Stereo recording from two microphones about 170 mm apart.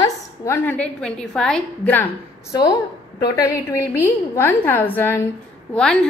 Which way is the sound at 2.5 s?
20° left (ahead or behind).